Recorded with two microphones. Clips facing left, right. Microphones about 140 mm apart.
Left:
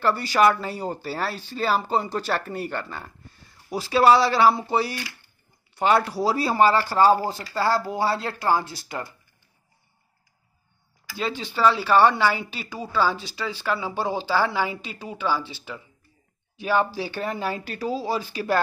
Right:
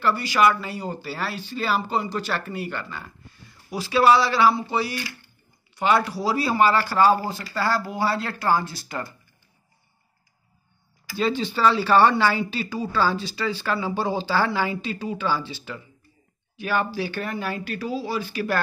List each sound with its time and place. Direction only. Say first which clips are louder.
0.0 s speech: left 1 dB; 40° left (ahead or behind)
6.3 s speech: even; 30° left (ahead or behind); by 9.1 s 15° left (ahead or behind)
11.1 s speech: right 3 dB; 5° left (ahead or behind)
16.5 s speech: left 2 dB; 25° left (ahead or behind)